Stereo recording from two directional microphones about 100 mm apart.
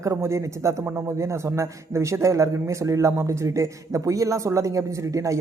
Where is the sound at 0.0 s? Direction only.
30° right (ahead or behind).